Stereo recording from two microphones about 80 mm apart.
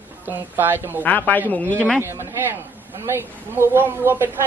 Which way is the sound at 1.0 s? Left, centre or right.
Left.